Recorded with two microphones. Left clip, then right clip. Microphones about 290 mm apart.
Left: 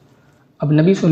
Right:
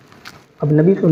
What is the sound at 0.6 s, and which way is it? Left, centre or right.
Speech, left.